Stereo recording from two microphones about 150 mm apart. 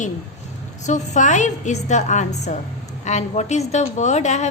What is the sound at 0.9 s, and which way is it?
A woman's voice, 55° left (ahead or behind).